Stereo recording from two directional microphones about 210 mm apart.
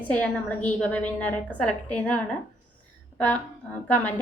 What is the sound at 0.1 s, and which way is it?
A woman's voice, 5° left (ahead or behind).